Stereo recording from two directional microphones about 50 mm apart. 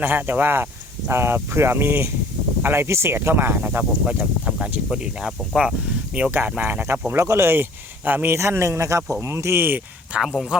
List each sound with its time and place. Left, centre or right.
0.0 s speech: right
4.9 s speech: centre
6.3 s speech: right
7.3 s speech: right
8.3 s speech: right
9.2 s speech: right
10.2 s speech: centre